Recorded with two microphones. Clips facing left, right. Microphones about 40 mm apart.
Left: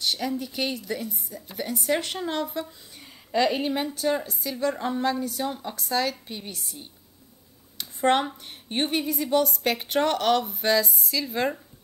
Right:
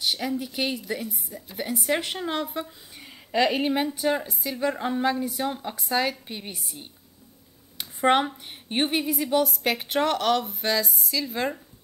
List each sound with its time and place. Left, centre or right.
0.0 s a woman's voice: centre
7.7 s a sound: centre
8.6 s a woman's voice: centre